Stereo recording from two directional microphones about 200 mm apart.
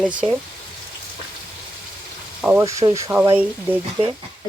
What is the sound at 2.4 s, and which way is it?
Speech, 5° right (ahead or behind).